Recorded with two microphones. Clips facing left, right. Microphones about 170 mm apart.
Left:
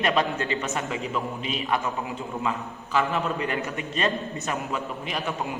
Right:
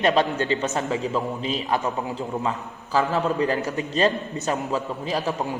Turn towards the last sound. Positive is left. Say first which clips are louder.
# right 4 dB
turn(degrees=-35)  # may be behind; listen again after turning